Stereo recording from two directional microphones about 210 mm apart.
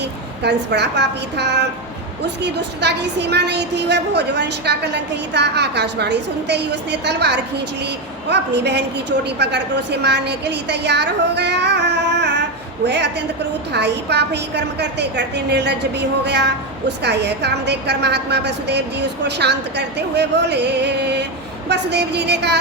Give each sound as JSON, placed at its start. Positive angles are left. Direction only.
{"t": 0.0, "sound": "a woman's voice", "side_deg": -55}